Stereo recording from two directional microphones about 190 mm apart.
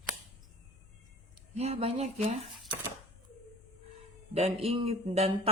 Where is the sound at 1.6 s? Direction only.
35° right (ahead or behind).